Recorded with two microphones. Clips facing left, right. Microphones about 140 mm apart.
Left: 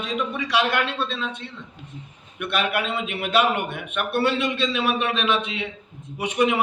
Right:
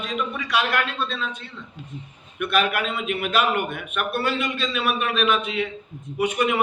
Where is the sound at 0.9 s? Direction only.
25° left (ahead or behind).